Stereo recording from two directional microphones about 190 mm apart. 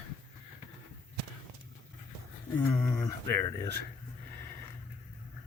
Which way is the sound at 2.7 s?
10° left (ahead or behind).